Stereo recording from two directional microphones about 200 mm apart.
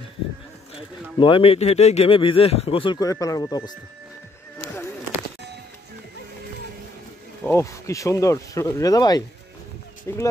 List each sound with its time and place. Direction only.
1.1 s speech: 25° left (ahead or behind)
7.4 s speech: 15° left (ahead or behind)